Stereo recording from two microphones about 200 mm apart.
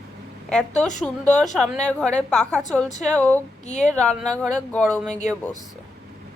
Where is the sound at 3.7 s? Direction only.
35° left (ahead or behind).